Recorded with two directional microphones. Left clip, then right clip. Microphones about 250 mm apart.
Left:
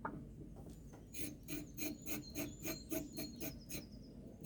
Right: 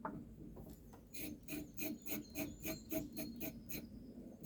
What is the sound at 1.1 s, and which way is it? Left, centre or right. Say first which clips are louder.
Filing: even; centre.